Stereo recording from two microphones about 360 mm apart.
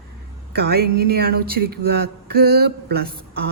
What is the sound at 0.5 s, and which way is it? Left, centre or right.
A woman's voice, right.